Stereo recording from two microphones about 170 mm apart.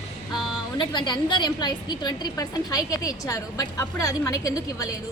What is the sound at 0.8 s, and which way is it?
A woman's voice, 25° left (ahead or behind).